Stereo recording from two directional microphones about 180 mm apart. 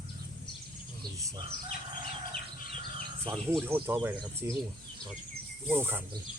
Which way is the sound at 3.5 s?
15° right (ahead or behind).